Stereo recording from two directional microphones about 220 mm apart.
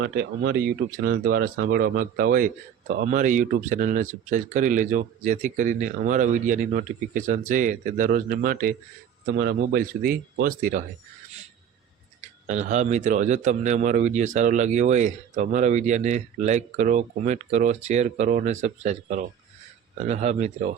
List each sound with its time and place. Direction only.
0.0 s speech: 50° right (ahead or behind)
12.5 s speech: 30° right (ahead or behind)